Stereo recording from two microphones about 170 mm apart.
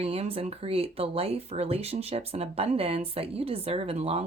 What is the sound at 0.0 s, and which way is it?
Speech, 35° right (ahead or behind).